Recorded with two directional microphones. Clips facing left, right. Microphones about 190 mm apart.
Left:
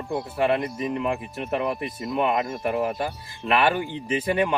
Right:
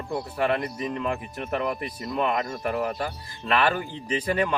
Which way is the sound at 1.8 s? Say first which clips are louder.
Left 2 dB; 25° left (ahead or behind).